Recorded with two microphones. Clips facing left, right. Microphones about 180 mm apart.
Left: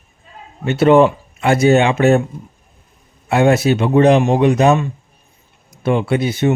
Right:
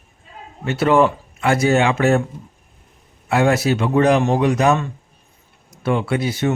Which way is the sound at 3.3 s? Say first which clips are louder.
Left 3 dB; 25° left (ahead or behind).